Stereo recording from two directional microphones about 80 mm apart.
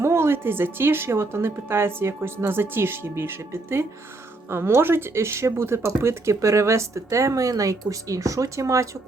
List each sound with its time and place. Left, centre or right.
0.0 s speech: right